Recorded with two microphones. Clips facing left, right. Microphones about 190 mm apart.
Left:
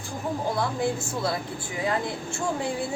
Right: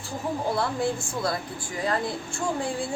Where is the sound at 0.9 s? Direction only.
25° left (ahead or behind).